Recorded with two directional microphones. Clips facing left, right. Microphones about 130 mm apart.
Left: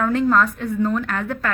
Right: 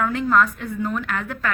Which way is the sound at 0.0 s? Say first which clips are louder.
Left 2 dB; 35° left (ahead or behind).